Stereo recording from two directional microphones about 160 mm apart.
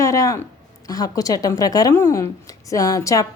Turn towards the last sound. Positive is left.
turn(degrees=20)  # may be behind; listen again after turning